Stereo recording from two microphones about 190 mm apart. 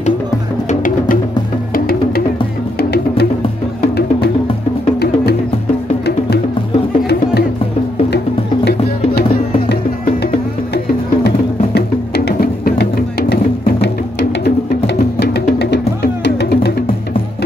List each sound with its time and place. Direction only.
0.7 s music: 45° left (ahead or behind)
12.3 s music: 55° left (ahead or behind)
15.0 s music: 55° left (ahead or behind)